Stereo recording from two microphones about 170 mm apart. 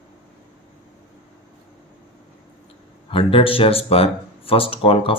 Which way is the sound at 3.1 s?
35° left (ahead or behind).